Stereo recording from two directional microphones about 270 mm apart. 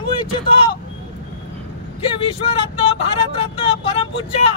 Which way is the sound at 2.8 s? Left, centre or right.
Left.